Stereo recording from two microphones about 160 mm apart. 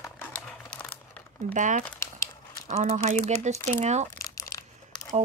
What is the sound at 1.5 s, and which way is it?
Speech, 50° right (ahead or behind).